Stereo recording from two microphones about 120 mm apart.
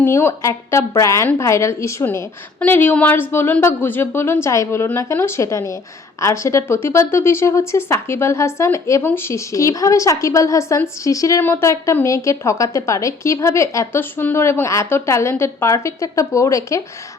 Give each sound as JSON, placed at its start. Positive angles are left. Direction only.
{"t": 0.0, "sound": "speech", "side_deg": 20}